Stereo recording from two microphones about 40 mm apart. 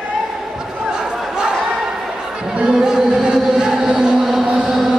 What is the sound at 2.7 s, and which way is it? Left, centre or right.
Music, centre.